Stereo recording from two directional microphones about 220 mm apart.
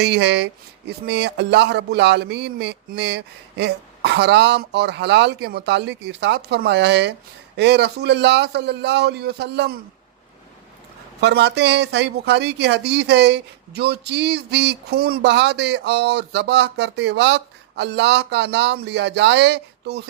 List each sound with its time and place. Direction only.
0.0 s a man's voice: 50° right (ahead or behind)
11.2 s a man's voice: 50° right (ahead or behind)